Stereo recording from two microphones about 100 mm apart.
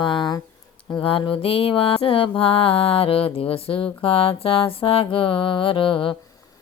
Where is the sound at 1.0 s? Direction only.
60° left (ahead or behind).